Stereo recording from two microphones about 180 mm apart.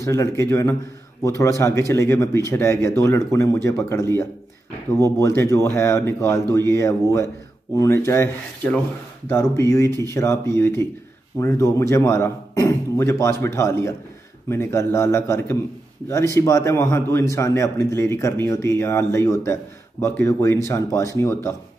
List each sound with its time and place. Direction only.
0.0 s a man's voice: 15° left (ahead or behind)
5.2 s a man's voice: 15° left (ahead or behind)
9.3 s a man's voice: 15° left (ahead or behind)